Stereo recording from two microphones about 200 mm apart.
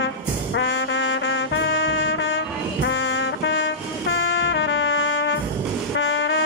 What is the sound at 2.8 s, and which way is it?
Music, 65° left (ahead or behind).